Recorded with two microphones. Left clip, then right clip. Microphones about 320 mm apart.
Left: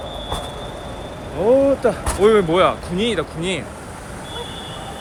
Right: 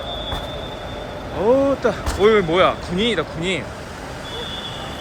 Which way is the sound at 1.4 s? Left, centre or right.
Centre.